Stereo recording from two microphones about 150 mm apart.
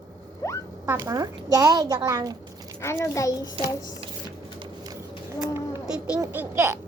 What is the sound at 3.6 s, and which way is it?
Speech, 35° right (ahead or behind).